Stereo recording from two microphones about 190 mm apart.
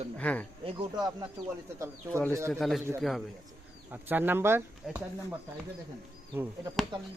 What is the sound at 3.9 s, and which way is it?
Speech, 10° right (ahead or behind).